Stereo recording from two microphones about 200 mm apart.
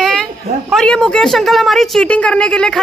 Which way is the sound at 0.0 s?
Centre (ahead or behind).